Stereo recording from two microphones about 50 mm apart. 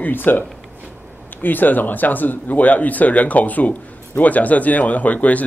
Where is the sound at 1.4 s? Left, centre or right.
Left.